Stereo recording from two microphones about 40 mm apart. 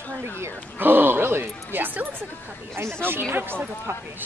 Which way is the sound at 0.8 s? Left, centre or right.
Right.